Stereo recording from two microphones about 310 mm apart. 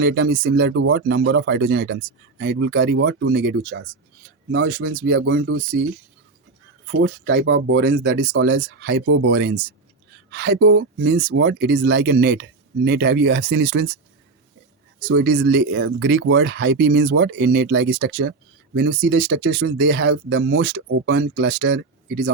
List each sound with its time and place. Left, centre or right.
0.0 s speech: right
7.0 s speech: right
15.0 s speech: right